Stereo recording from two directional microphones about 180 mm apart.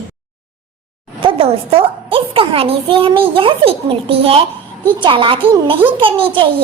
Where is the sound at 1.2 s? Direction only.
30° right (ahead or behind).